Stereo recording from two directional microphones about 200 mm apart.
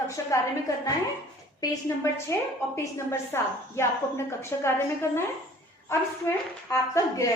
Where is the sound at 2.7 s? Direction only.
15° left (ahead or behind).